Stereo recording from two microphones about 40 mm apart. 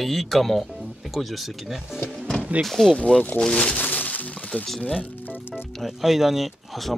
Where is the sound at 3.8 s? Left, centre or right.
Left.